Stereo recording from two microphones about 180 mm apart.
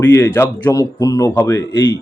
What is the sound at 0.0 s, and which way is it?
A man's voice, 15° left (ahead or behind).